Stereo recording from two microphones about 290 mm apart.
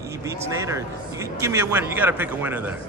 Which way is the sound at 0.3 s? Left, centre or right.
Centre.